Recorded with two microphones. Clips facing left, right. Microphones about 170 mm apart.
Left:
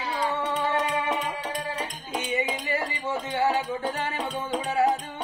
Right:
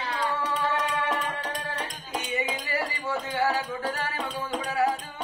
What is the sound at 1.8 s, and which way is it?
Music, 20° left (ahead or behind).